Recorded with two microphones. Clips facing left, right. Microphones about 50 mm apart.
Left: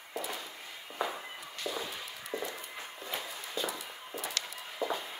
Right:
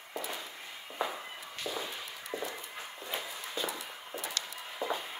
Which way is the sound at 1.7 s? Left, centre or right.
Centre.